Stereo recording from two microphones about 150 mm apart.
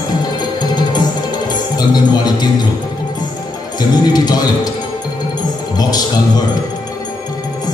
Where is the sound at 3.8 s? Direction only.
25° left (ahead or behind).